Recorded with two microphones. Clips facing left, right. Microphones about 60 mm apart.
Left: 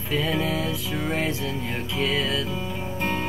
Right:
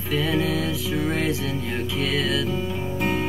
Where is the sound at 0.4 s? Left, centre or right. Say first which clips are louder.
Right 2 dB; left.